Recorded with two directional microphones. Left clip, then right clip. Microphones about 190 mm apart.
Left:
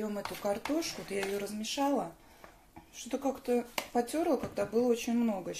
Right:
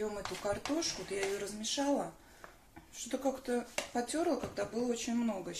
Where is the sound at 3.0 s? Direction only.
25° left (ahead or behind).